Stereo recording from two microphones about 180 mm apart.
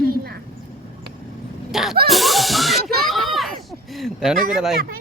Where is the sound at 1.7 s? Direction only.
Centre (ahead or behind).